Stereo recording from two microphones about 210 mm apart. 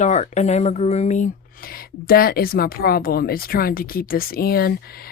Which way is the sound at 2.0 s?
45° left (ahead or behind).